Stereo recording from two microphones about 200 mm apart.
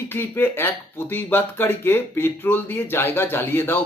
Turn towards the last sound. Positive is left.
turn(degrees=10)  # may be behind; listen again after turning